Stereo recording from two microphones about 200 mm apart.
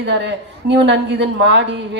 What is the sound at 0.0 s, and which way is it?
A woman's voice, 60° right (ahead or behind).